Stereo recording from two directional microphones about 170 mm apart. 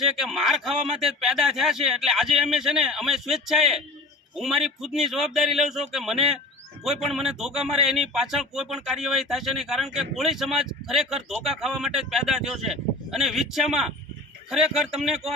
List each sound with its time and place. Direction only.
0.0 s speech: centre (ahead or behind)